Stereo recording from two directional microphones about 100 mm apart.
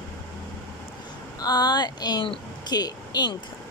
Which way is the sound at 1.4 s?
40° left (ahead or behind).